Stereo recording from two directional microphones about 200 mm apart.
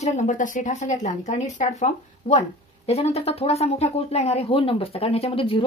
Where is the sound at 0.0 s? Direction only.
35° left (ahead or behind).